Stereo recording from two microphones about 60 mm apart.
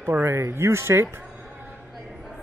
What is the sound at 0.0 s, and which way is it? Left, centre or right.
Speech, right.